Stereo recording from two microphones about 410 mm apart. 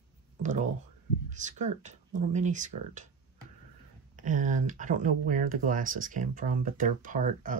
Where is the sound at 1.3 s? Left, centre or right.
Centre.